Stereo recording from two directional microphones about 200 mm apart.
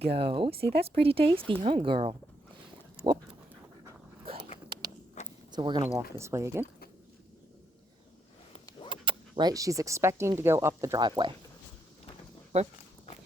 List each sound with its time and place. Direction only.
0.0 s speech: 30° right (ahead or behind)
0.5 s speech: 55° right (ahead or behind)
1.0 s speech: 30° right (ahead or behind)
5.5 s speech: 20° right (ahead or behind)
8.9 s speech: 25° right (ahead or behind)
12.5 s speech: 30° right (ahead or behind)